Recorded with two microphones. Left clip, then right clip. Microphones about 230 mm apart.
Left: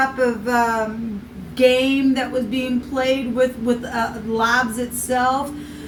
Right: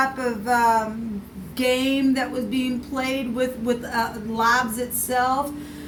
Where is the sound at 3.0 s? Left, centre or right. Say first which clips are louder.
Left 7 dB; right.